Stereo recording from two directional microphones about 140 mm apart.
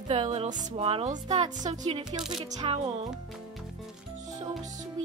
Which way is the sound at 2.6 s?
40° right (ahead or behind).